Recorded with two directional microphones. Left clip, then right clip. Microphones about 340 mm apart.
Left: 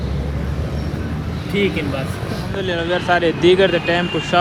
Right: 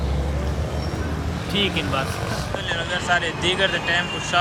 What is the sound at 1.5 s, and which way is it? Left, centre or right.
Speech, centre.